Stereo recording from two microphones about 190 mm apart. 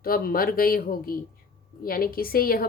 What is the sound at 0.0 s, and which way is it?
Speech, 50° left (ahead or behind).